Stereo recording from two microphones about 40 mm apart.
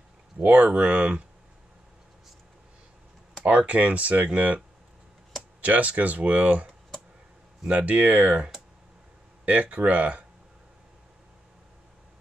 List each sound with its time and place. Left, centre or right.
0.4 s speech: right
3.4 s speech: right
5.6 s speech: right
9.5 s speech: right